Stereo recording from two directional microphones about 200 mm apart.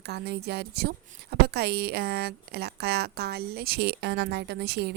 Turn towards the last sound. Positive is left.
turn(degrees=-55)  # may be behind; listen again after turning